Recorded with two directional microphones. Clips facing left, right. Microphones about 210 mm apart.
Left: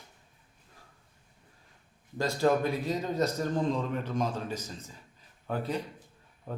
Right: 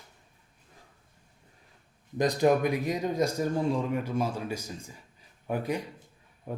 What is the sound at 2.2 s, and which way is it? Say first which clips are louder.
A man's voice: right 3 dB; 15° right (ahead or behind).